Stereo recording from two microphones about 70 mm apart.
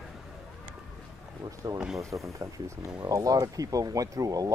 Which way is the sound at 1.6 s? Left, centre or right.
Right.